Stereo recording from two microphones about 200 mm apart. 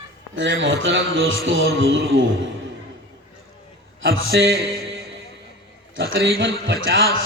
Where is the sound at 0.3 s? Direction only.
70° right (ahead or behind).